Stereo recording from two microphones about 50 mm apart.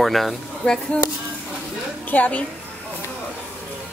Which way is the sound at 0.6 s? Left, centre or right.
Left.